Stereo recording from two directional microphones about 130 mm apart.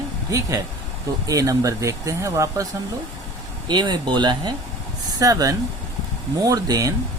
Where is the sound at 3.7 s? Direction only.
35° right (ahead or behind).